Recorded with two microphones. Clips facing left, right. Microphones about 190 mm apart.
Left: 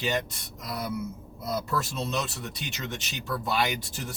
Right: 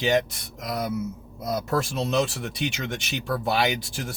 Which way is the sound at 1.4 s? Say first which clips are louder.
Right 4 dB; 75° right (ahead or behind).